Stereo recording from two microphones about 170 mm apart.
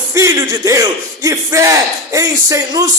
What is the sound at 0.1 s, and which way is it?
A man's voice, 20° right (ahead or behind).